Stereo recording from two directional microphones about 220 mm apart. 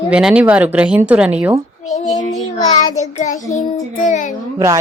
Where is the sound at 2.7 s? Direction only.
30° left (ahead or behind).